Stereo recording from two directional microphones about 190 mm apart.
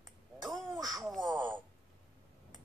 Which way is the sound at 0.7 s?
20° right (ahead or behind).